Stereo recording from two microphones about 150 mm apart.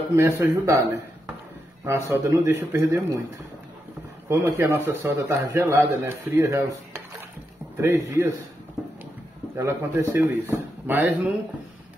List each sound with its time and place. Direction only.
0.1 s speech: 20° right (ahead or behind)
1.9 s speech: 20° right (ahead or behind)
4.3 s speech: 15° right (ahead or behind)
8.8 s music: centre (ahead or behind)
9.6 s speech: 20° right (ahead or behind)